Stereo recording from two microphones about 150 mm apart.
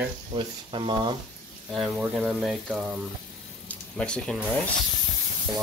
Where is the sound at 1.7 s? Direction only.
Centre (ahead or behind).